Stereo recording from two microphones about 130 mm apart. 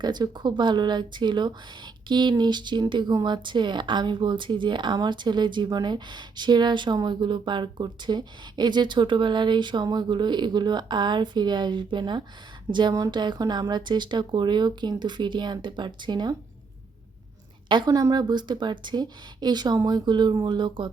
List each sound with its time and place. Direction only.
0.0 s speech: 35° right (ahead or behind)
17.7 s speech: 35° right (ahead or behind)